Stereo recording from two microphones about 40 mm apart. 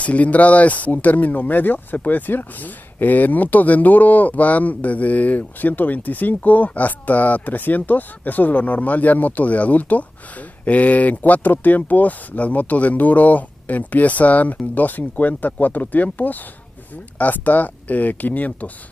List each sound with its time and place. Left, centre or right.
0.0 s speech: left